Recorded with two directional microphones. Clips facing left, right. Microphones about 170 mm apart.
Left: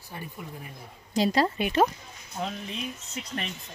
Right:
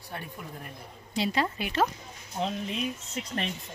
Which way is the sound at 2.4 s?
30° right (ahead or behind).